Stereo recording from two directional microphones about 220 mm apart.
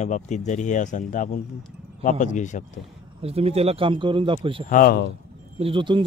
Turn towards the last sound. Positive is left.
turn(degrees=-20)  # may be behind; listen again after turning